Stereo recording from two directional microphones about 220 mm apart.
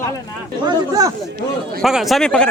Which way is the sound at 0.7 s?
15° right (ahead or behind).